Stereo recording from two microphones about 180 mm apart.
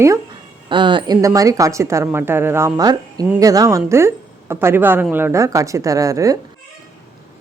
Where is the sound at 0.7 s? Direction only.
25° right (ahead or behind).